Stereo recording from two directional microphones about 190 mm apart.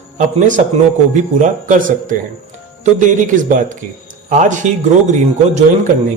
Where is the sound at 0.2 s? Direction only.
40° right (ahead or behind).